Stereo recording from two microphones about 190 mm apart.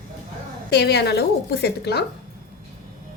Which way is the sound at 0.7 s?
60° left (ahead or behind).